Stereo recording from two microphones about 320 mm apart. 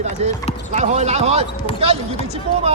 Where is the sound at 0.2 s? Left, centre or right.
Centre.